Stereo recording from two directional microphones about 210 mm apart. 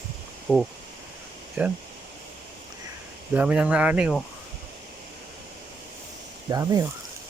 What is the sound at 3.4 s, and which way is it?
Speech, 5° right (ahead or behind).